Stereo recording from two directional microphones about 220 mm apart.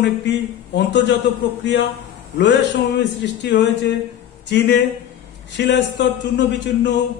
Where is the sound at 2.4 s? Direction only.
55° left (ahead or behind).